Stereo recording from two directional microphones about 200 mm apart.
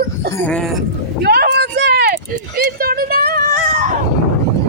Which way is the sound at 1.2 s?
55° right (ahead or behind).